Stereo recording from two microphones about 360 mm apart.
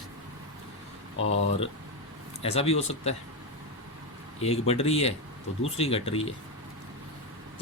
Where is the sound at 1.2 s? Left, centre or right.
Left.